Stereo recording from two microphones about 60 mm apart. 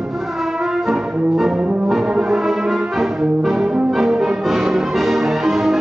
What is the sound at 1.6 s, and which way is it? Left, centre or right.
Brass instrument, centre.